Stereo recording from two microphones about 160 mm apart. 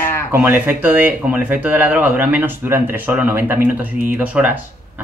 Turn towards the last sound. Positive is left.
turn(degrees=-10)  # may be behind; listen again after turning